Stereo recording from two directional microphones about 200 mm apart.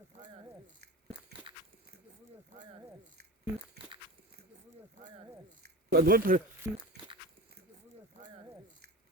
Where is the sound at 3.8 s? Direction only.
55° right (ahead or behind).